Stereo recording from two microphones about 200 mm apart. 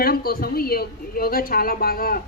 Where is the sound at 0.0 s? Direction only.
50° left (ahead or behind).